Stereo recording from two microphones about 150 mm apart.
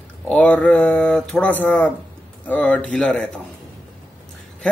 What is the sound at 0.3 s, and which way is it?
Speech, 10° left (ahead or behind).